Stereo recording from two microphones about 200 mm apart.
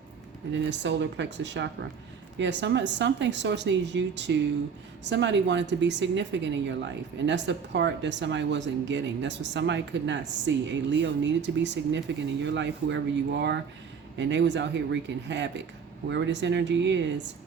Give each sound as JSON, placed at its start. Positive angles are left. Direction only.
{"t": 0.5, "sound": "a woman's voice", "side_deg": -65}